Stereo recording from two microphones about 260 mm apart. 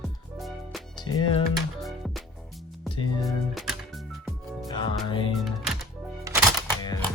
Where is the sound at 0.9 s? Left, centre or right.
Centre.